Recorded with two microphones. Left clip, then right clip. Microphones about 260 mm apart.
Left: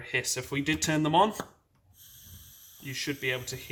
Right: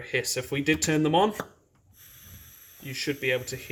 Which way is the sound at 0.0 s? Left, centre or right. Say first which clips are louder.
Right 2 dB; centre.